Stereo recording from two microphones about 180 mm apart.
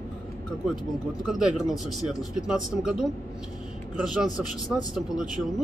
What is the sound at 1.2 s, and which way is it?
A man's voice, 5° right (ahead or behind).